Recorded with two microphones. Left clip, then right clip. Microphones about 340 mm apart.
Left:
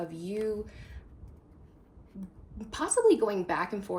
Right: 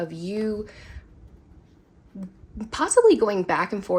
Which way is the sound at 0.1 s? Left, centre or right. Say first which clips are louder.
Right 4 dB; right.